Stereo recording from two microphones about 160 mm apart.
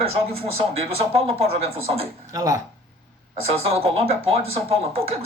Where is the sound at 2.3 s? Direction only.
20° right (ahead or behind).